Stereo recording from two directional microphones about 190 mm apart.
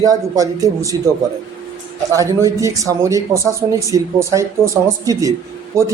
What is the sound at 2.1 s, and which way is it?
Speech, 15° right (ahead or behind).